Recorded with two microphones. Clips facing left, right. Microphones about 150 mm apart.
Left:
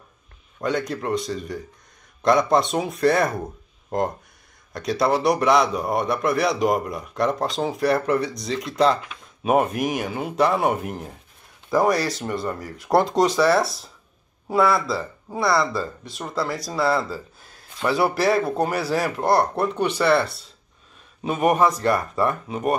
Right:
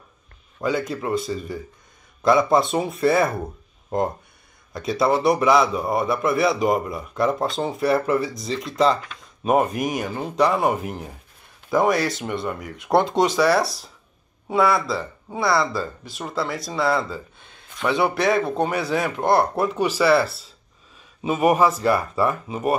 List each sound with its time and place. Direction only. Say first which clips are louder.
0.6 s a man's voice: right 1 dB; centre (ahead or behind)
12.5 s speech: even; 20° right (ahead or behind)
12.8 s a man's voice: even; centre (ahead or behind)